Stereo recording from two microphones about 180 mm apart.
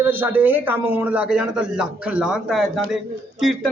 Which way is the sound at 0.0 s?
10° right (ahead or behind).